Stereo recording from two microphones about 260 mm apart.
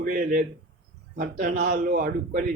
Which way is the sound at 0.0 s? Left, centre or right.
Right.